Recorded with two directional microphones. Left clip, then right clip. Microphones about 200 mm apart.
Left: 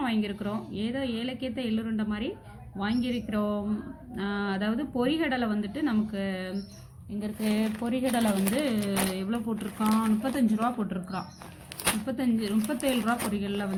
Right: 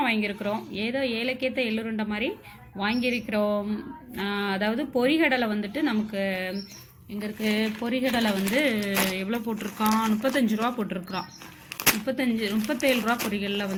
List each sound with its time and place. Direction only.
0.0 s speech: 5° right (ahead or behind)
9.7 s speech: 15° right (ahead or behind)
10.4 s speech: centre (ahead or behind)